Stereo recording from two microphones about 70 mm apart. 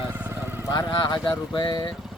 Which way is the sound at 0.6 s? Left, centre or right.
Left.